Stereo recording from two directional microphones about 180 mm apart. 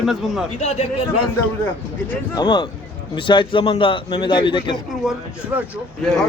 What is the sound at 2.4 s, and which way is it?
Speech, 25° left (ahead or behind).